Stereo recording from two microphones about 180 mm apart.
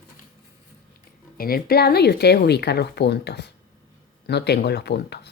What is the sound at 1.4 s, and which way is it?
Speech, 55° left (ahead or behind).